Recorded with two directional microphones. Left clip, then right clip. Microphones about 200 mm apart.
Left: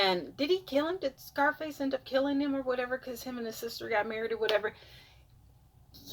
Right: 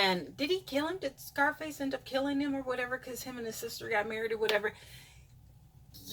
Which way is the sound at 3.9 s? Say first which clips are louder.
Left 1 dB; 5° left (ahead or behind).